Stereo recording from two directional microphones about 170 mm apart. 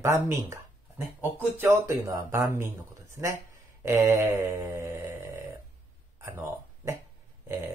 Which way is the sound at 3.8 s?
15° right (ahead or behind).